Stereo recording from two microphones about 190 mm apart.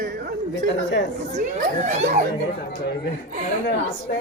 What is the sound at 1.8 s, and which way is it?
Speech, 40° right (ahead or behind).